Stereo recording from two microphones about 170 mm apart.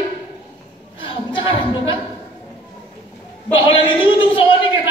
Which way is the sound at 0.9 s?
30° left (ahead or behind).